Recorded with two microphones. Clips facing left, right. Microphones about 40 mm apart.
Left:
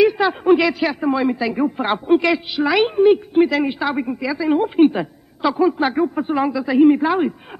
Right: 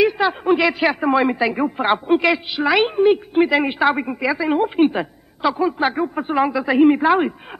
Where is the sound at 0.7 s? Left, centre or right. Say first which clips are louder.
Right 1 dB; right.